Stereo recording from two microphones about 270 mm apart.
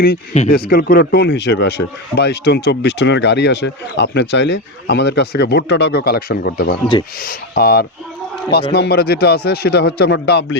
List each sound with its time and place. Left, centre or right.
0.0 s speech: left